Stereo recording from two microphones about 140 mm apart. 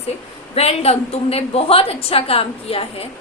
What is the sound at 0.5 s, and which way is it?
A woman's voice, 45° left (ahead or behind).